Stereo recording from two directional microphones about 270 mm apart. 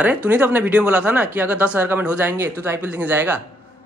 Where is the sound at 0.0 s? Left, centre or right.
Centre.